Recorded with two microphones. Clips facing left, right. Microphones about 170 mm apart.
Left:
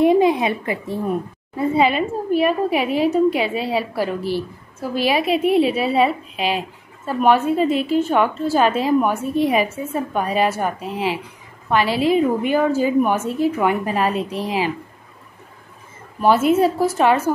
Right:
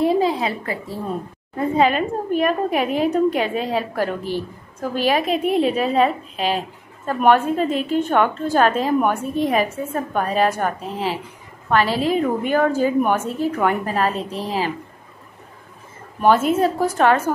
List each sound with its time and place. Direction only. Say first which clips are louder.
0.0 s a woman's voice: left 4 dB; 20° left (ahead or behind)
1.7 s a woman's voice: even; 5° left (ahead or behind)
12.2 s a woman's voice: left 1 dB; 10° left (ahead or behind)
16.2 s a woman's voice: left 1 dB; 10° left (ahead or behind)